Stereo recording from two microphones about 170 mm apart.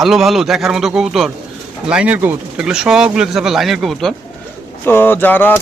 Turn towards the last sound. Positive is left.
turn(degrees=10)  # may be behind; listen again after turning